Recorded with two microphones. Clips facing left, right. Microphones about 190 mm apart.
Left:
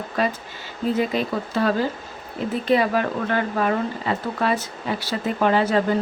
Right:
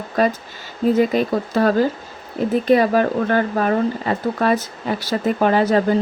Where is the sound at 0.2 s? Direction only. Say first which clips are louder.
Right 6 dB; 40° right (ahead or behind).